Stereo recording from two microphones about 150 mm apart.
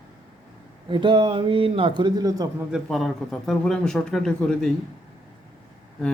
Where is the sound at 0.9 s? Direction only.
35° right (ahead or behind).